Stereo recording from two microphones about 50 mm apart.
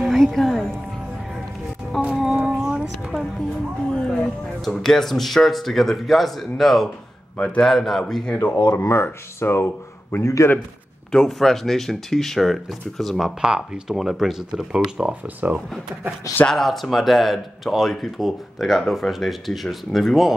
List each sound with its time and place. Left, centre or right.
0.1 s a woman's voice: centre
2.2 s a sound: right
3.9 s speech: centre
7.3 s a man's voice: left
7.6 s speech: centre
8.0 s speech: centre
8.4 s speech: left
10.2 s a man's voice: left
11.1 s speech: centre
13.4 s speech: centre
14.5 s speech: centre
15.4 s speech: right
16.4 s speech: centre